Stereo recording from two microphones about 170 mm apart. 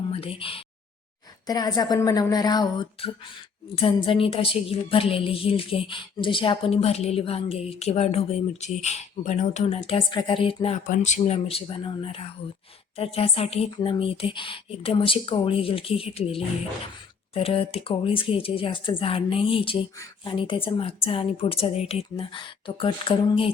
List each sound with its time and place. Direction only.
0.1 s a woman's voice: 35° left (ahead or behind)